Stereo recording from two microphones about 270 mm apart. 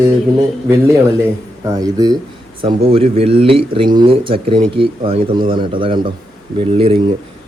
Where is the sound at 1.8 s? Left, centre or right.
Centre.